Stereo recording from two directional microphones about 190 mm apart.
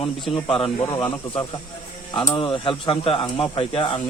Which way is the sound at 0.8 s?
15° left (ahead or behind).